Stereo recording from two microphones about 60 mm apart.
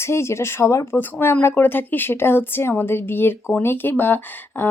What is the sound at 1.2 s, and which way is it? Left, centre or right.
Speech, left.